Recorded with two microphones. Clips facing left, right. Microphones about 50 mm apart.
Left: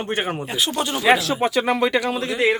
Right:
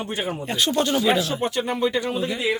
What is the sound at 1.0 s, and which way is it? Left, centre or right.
Speech, left.